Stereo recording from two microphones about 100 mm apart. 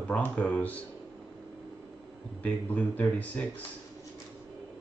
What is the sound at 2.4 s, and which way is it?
Speech, 15° left (ahead or behind).